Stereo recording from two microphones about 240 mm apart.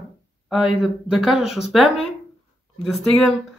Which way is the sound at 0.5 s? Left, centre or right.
Centre.